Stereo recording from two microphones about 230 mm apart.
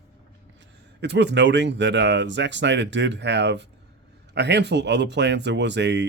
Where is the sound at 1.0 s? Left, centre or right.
Right.